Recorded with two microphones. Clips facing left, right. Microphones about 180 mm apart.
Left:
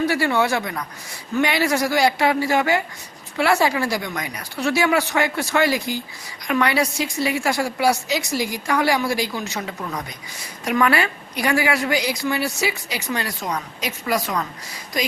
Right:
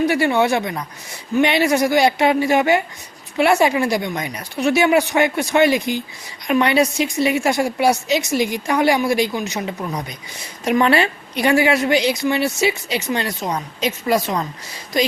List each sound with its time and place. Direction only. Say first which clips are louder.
0.0 s a woman's voice: right 3 dB; 20° right (ahead or behind)